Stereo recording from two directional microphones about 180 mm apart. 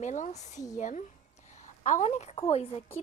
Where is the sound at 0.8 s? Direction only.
45° left (ahead or behind).